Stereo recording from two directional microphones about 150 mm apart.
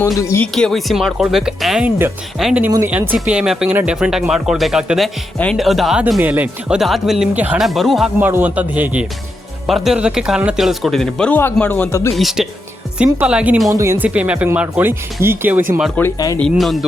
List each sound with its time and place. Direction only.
0.2 s speech: 20° left (ahead or behind)
0.4 s speech: 5° left (ahead or behind)
7.7 s speech: centre (ahead or behind)
8.2 s speech: 10° right (ahead or behind); by 12.1 s 20° left (ahead or behind)
12.1 s speech: centre (ahead or behind)
13.7 s speech: 20° right (ahead or behind)
16.0 s speech: 20° left (ahead or behind)
16.4 s speech: centre (ahead or behind)